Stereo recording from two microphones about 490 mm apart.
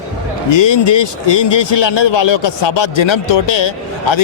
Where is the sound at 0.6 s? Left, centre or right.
Left.